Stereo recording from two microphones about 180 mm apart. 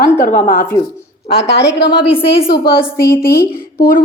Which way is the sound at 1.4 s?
65° left (ahead or behind).